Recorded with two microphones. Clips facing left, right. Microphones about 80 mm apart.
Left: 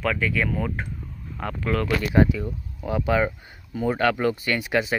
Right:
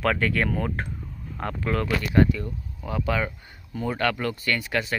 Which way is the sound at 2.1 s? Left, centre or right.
Centre.